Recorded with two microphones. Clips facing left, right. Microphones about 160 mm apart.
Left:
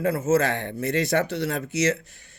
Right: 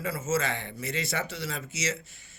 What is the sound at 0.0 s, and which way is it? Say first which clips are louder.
Speech: left 8 dB; 60° left (ahead or behind).